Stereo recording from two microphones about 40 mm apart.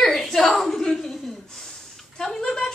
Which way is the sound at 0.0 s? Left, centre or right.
Centre.